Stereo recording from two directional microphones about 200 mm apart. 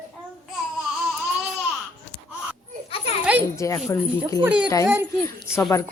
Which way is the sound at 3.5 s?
15° left (ahead or behind).